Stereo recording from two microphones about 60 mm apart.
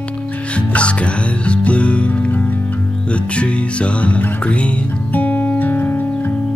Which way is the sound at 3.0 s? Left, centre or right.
Centre.